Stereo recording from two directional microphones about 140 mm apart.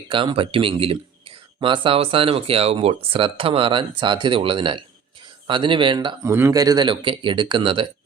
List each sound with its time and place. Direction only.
0.1 s speech: 40° right (ahead or behind)
6.2 s speech: 20° right (ahead or behind); by 7.9 s 35° right (ahead or behind)